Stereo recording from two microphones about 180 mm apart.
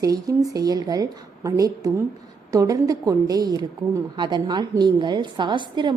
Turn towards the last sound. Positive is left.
turn(degrees=-25)  # may be behind; listen again after turning